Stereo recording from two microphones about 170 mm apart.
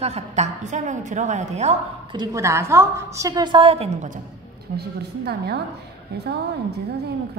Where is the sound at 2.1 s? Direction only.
15° right (ahead or behind); by 4.2 s 45° right (ahead or behind).